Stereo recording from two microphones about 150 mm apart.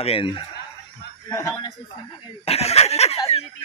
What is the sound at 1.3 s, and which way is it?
Speech, 25° left (ahead or behind).